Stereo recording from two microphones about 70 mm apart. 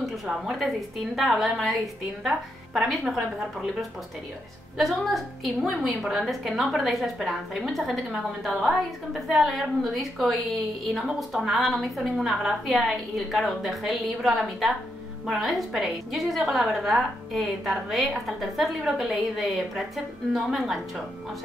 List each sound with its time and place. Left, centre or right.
0.0 s a woman's voice: centre
4.7 s a woman's voice: centre
7.7 s a woman's voice: centre